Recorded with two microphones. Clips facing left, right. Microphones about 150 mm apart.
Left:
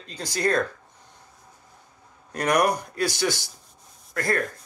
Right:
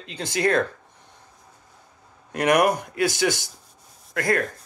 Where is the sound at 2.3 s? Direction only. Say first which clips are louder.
Right 3 dB; 55° right (ahead or behind).